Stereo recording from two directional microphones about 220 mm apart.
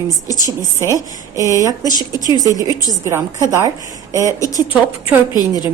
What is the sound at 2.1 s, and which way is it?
Speech, 15° left (ahead or behind).